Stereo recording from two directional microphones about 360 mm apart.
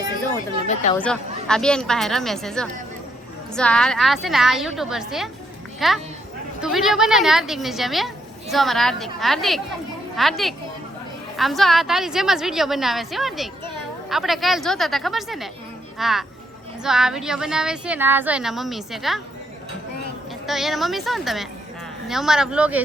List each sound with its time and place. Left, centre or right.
0.7 s speech: centre
0.9 s a woman's voice: centre
20.5 s a woman's voice: centre